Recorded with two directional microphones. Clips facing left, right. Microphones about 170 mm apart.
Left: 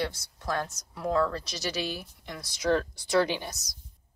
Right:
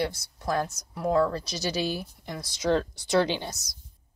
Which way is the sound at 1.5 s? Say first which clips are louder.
Right 4 dB; 30° right (ahead or behind).